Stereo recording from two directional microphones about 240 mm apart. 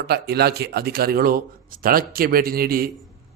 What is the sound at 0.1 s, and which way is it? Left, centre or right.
Speech, right.